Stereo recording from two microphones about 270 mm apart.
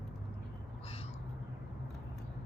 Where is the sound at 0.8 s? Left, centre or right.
Left.